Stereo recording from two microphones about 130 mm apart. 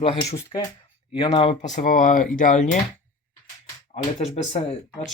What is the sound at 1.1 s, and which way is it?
Speech, 45° left (ahead or behind).